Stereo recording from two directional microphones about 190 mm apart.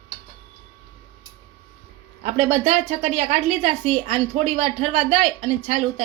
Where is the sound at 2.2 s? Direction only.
35° right (ahead or behind).